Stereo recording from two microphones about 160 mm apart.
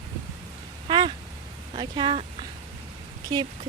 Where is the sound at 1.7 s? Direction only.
30° right (ahead or behind).